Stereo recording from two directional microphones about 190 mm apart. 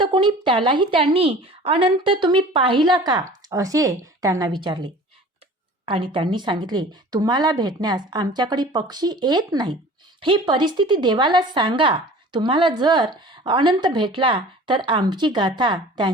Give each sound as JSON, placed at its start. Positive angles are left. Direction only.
{"t": 0.0, "sound": "speech", "side_deg": -25}